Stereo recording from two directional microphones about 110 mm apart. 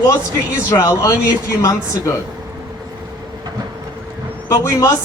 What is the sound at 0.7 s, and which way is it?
Speech, 25° left (ahead or behind).